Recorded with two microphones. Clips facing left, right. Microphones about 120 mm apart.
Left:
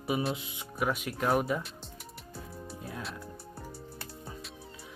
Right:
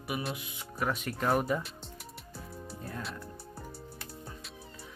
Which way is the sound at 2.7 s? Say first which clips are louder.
Right 1 dB; 5° left (ahead or behind).